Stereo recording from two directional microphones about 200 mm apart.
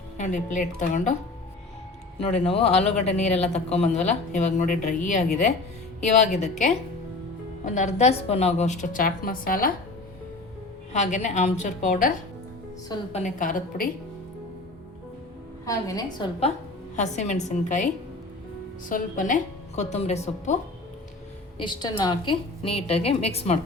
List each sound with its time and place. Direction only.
0.2 s speech: 40° left (ahead or behind)
2.4 s a woman's voice: 30° left (ahead or behind)
7.6 s speech: 35° left (ahead or behind)
10.9 s speech: 35° left (ahead or behind)
15.6 s a woman's voice: 15° left (ahead or behind)
16.9 s speech: 35° left (ahead or behind)
18.9 s speech: 40° left (ahead or behind)
21.6 s a woman's voice: 20° left (ahead or behind)